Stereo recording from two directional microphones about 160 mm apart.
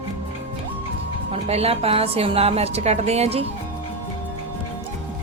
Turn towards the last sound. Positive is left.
turn(degrees=-40)  # may be behind; listen again after turning